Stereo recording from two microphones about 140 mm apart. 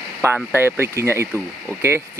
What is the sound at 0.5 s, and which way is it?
Speech, 15° right (ahead or behind).